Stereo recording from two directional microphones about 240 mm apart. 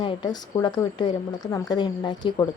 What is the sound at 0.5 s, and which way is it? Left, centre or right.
Speech, centre.